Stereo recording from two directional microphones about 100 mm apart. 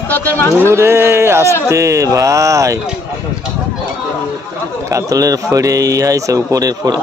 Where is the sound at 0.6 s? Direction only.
25° right (ahead or behind).